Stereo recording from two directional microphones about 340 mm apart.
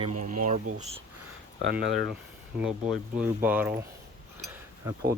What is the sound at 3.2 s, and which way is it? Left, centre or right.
Speech, centre.